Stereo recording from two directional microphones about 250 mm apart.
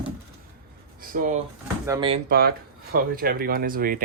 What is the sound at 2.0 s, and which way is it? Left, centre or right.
Speech, right.